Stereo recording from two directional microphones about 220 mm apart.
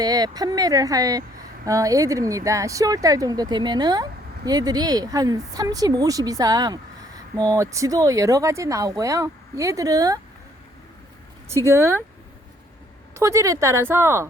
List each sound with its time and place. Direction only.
0.0 s speech: 15° right (ahead or behind)
11.4 s speech: 10° right (ahead or behind)
13.1 s speech: 15° right (ahead or behind)